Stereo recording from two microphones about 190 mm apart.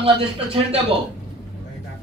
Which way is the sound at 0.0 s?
30° right (ahead or behind).